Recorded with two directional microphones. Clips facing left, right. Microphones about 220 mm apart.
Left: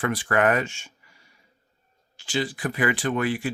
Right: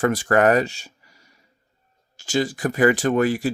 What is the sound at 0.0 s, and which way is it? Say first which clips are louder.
Speech: right 5 dB; 45° right (ahead or behind).